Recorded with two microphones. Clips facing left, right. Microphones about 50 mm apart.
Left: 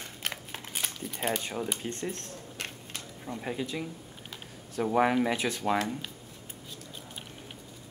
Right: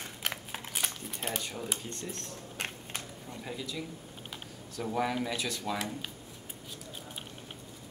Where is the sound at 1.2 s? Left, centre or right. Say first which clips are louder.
Left 6 dB; left.